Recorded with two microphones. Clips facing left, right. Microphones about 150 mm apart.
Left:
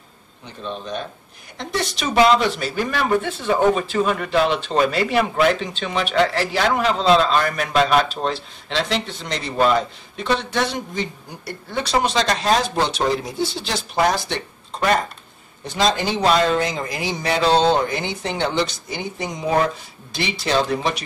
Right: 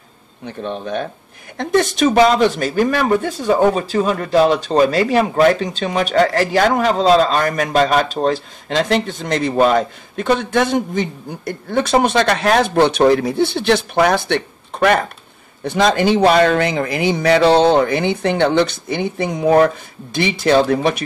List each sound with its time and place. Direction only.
0.5 s speech: 55° right (ahead or behind)